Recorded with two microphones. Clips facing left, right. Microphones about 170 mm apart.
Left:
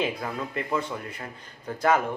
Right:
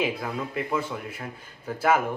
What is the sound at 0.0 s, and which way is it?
Speech, 5° right (ahead or behind).